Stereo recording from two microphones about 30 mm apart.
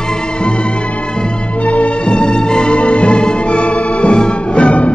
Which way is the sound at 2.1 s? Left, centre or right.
Left.